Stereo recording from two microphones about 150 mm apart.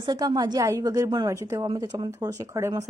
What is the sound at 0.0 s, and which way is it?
A woman's voice, 30° right (ahead or behind).